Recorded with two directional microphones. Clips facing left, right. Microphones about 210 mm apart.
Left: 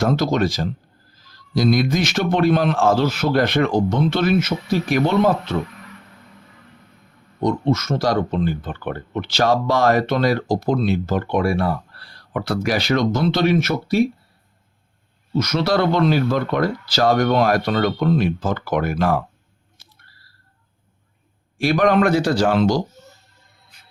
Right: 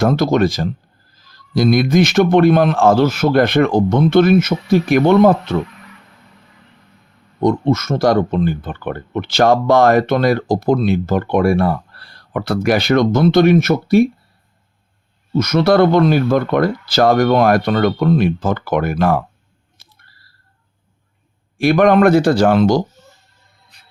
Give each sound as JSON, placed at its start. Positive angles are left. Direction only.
{"t": 0.0, "sound": "a man's voice", "side_deg": -55}
{"t": 7.4, "sound": "speech", "side_deg": -50}
{"t": 15.4, "sound": "speech", "side_deg": -55}
{"t": 21.6, "sound": "a man's voice", "side_deg": -55}